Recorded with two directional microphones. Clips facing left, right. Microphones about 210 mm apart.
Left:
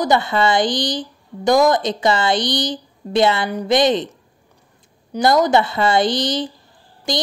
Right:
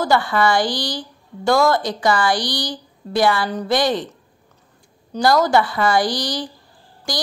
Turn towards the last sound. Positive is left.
turn(degrees=20)  # may be behind; listen again after turning